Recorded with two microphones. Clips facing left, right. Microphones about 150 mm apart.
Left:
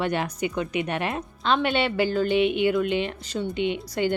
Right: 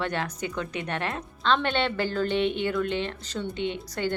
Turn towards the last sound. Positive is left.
turn(degrees=15)  # may be behind; listen again after turning